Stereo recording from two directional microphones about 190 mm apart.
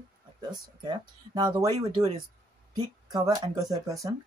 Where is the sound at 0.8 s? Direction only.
25° right (ahead or behind).